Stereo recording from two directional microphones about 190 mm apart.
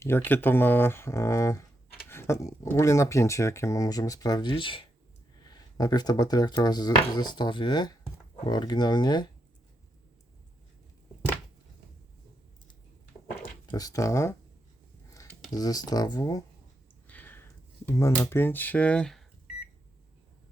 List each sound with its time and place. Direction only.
0.0 s speech: 10° left (ahead or behind)
13.4 s speech: 20° left (ahead or behind)
15.1 s a sound: 15° left (ahead or behind)
15.5 s speech: 20° left (ahead or behind)
17.1 s a sound: 10° left (ahead or behind)
17.8 s speech: 15° left (ahead or behind)